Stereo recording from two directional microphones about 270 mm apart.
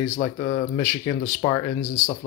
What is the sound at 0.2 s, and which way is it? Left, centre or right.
Speech, left.